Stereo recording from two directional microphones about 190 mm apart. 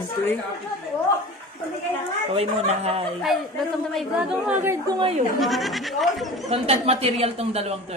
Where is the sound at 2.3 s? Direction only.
30° right (ahead or behind).